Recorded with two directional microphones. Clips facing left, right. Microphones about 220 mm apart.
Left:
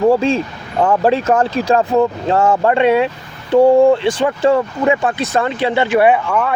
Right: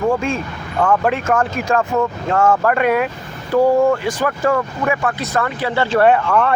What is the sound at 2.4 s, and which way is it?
Speech, 20° left (ahead or behind).